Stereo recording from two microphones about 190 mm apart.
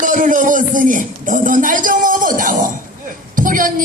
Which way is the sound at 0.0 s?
45° right (ahead or behind).